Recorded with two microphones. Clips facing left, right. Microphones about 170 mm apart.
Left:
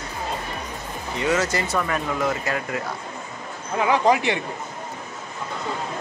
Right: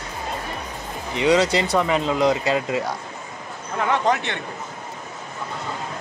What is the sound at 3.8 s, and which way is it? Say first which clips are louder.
Speech: left 2 dB; 5° left (ahead or behind).